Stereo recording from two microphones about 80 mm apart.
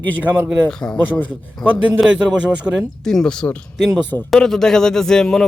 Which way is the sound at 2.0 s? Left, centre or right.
Centre.